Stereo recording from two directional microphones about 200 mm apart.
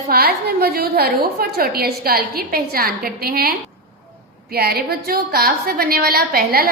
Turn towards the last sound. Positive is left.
turn(degrees=-50)  # may be behind; listen again after turning